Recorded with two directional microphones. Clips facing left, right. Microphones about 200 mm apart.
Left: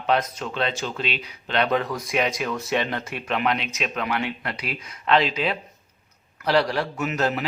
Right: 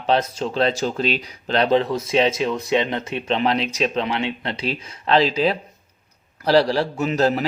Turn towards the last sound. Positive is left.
turn(degrees=-35)  # may be behind; listen again after turning